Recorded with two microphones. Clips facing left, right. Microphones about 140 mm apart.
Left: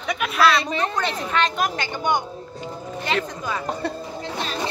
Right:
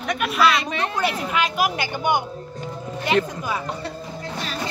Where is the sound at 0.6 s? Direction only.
35° left (ahead or behind).